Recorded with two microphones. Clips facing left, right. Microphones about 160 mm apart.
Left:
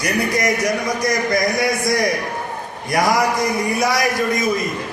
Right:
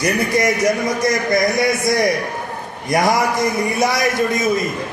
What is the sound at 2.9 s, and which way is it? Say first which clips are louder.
Speech: right 2 dB; 20° right (ahead or behind).